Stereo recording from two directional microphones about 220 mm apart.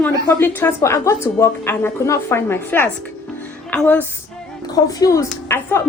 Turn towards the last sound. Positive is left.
turn(degrees=10)  # may be behind; listen again after turning